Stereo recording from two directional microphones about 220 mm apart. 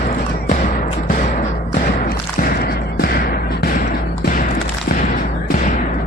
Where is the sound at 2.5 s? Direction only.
45° left (ahead or behind).